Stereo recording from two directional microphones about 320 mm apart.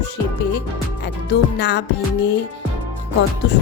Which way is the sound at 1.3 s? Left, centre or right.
Left.